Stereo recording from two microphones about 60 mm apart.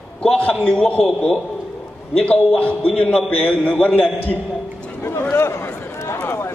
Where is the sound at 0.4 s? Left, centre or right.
Left.